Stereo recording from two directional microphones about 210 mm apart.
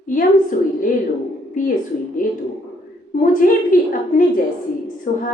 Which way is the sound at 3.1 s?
40° left (ahead or behind).